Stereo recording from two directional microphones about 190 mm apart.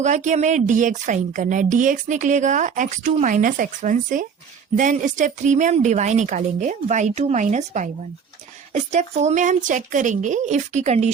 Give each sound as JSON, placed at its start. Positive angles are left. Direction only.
{"t": 0.0, "sound": "speech", "side_deg": -40}